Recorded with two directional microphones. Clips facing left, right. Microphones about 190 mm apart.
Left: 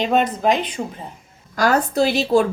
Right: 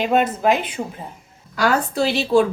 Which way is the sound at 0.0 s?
5° right (ahead or behind).